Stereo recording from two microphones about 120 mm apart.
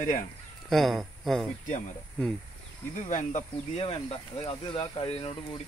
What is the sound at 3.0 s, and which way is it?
Speech, 90° left.